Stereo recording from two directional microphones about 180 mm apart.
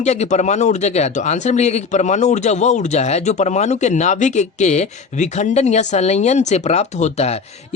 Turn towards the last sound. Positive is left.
turn(degrees=35)  # may be behind; listen again after turning